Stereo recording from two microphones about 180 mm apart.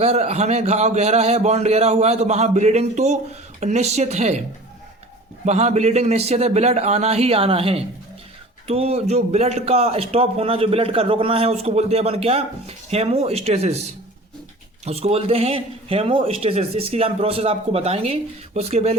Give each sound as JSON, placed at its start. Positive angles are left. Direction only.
{"t": 0.0, "sound": "a man's voice", "side_deg": -35}
{"t": 5.5, "sound": "a man's voice", "side_deg": -40}